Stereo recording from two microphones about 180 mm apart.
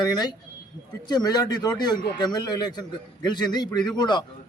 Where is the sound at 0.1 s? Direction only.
20° left (ahead or behind).